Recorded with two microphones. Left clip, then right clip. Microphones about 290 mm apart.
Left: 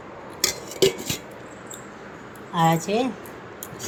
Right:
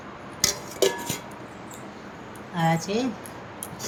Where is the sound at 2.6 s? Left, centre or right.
Centre.